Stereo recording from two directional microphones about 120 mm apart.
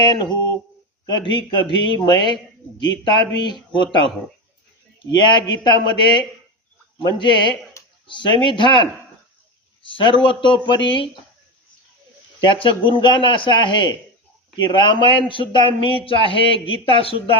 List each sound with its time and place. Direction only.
0.0 s a man's voice: 35° left (ahead or behind)
5.1 s a man's voice: 40° left (ahead or behind)
12.4 s a man's voice: 45° left (ahead or behind)